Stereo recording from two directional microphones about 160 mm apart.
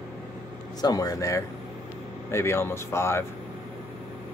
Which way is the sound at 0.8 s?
25° left (ahead or behind).